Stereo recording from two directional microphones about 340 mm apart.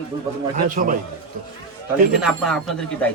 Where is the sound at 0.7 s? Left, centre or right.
Right.